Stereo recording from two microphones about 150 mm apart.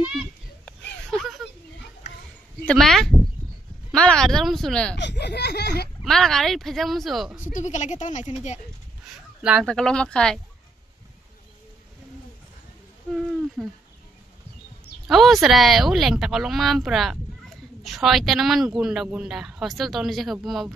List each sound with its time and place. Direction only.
0.7 s a sound: 5° left (ahead or behind)
2.6 s speech: 5° left (ahead or behind)
5.1 s speech: 90° left
6.0 s speech: centre (ahead or behind)
7.4 s a woman's voice: 55° left (ahead or behind)
9.4 s speech: 5° right (ahead or behind)
9.7 s speech: 5° left (ahead or behind)
13.6 s speech: centre (ahead or behind)
15.0 s speech: centre (ahead or behind)